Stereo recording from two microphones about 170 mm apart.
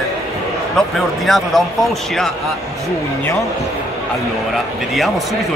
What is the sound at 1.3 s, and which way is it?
Speech, centre (ahead or behind).